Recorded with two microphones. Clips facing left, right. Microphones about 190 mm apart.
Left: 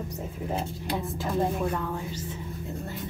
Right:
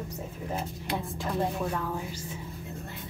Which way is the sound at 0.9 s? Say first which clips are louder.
Left 2 dB; 5° left (ahead or behind).